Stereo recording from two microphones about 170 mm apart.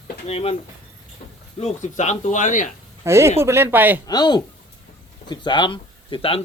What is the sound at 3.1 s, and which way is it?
Speech, 15° right (ahead or behind).